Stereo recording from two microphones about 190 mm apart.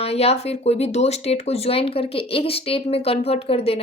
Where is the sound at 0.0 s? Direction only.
30° left (ahead or behind).